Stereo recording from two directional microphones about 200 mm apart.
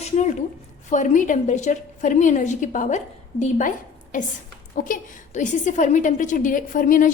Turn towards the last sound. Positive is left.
turn(degrees=40)  # may be behind; listen again after turning